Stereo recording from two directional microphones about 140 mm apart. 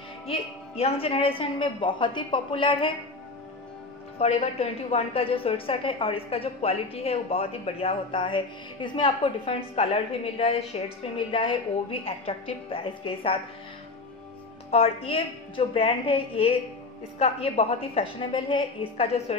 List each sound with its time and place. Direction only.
0.3 s a woman's voice: 45° left (ahead or behind)
4.2 s a woman's voice: 45° left (ahead or behind)
14.7 s a woman's voice: 45° left (ahead or behind)